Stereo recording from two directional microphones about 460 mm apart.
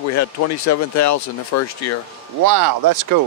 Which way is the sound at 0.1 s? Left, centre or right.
Left.